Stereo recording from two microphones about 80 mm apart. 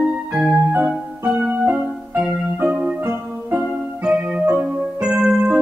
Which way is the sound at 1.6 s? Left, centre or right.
Centre.